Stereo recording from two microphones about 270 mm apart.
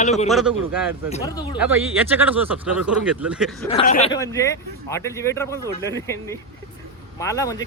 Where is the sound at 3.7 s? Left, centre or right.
Left.